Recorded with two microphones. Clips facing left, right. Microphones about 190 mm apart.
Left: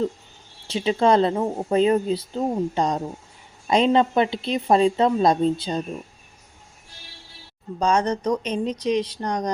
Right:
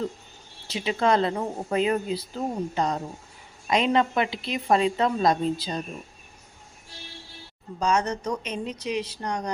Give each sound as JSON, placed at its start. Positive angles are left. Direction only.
{"t": 0.7, "sound": "speech", "side_deg": 30}
{"t": 7.8, "sound": "speech", "side_deg": 30}